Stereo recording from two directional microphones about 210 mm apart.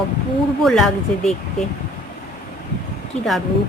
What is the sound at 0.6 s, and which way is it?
Speech, centre (ahead or behind).